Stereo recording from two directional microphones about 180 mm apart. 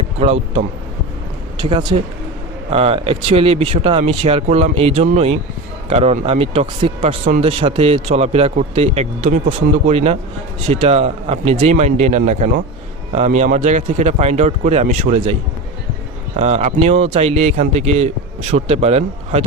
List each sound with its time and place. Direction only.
0.2 s a man's voice: 35° right (ahead or behind)